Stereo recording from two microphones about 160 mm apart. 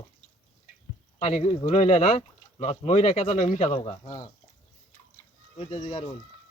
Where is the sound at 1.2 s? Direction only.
45° left (ahead or behind).